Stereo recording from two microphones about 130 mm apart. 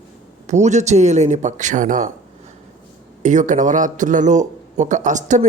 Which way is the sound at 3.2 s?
70° right (ahead or behind).